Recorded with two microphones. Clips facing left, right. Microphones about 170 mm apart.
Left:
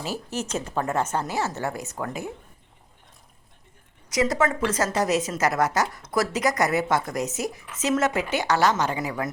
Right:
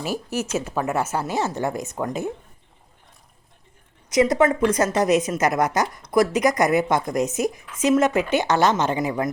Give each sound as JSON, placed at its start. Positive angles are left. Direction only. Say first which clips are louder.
{"t": 0.0, "sound": "a woman's voice", "louder": "right 4 dB", "side_deg": -10}
{"t": 4.1, "sound": "a woman's voice", "louder": "right 5 dB", "side_deg": -20}